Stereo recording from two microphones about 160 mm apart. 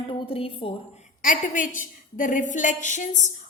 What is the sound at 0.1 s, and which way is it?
Speech, 35° left (ahead or behind).